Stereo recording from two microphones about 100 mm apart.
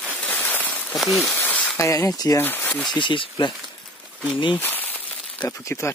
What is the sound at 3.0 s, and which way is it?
Speech, 55° left (ahead or behind).